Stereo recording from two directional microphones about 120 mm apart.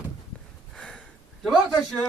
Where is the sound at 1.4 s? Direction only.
Centre (ahead or behind).